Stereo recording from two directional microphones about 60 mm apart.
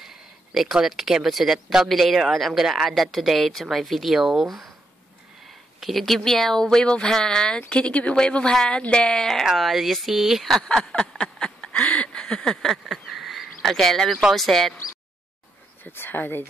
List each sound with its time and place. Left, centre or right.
0.0 s speech: centre
5.8 s speech: centre
10.6 s a sound: centre
12.7 s a sound: centre
14.3 s speech: centre
15.8 s speech: left